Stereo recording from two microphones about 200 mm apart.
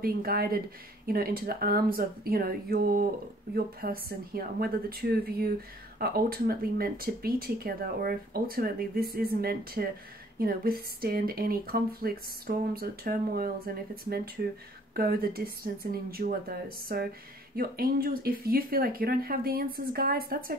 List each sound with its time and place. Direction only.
0.0 s speech: 50° right (ahead or behind)